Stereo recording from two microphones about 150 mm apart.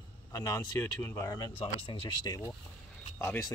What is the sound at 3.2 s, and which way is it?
Speech, 15° left (ahead or behind).